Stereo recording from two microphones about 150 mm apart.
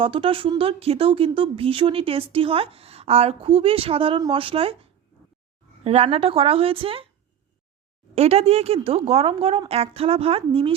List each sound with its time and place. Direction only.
0.0 s speech: 35° right (ahead or behind)
8.1 s speech: 45° right (ahead or behind)